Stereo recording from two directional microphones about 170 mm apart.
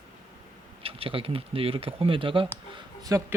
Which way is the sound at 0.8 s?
35° right (ahead or behind).